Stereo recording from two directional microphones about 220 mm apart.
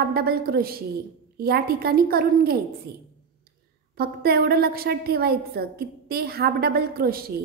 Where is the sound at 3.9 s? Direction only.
45° right (ahead or behind).